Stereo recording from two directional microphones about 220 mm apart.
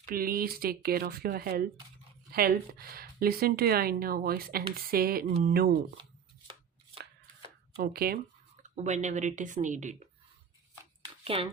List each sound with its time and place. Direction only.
0.0 s speech: 40° right (ahead or behind)
7.8 s speech: 45° right (ahead or behind)
8.7 s speech: 30° right (ahead or behind)
11.2 s speech: 25° right (ahead or behind)